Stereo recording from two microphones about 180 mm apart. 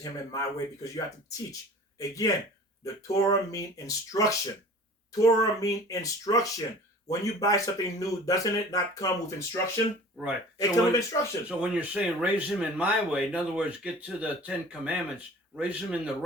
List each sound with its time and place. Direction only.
0.0 s speech: 20° left (ahead or behind)
10.2 s speech: 5° right (ahead or behind)
10.6 s speech: 20° left (ahead or behind)
11.4 s speech: 5° right (ahead or behind)